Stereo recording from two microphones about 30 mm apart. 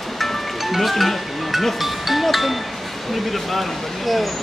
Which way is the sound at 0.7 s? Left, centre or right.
Centre.